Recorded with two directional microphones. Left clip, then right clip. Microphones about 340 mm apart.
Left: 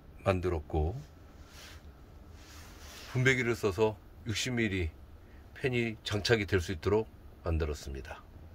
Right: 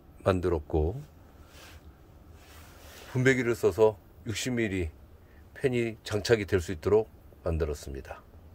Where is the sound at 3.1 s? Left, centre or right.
Centre.